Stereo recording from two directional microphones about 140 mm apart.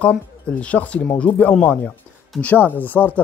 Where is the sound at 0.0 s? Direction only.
10° left (ahead or behind).